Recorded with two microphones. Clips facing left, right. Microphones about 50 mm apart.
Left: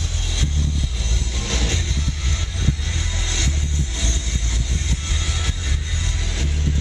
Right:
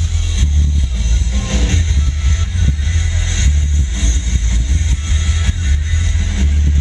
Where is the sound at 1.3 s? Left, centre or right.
Right.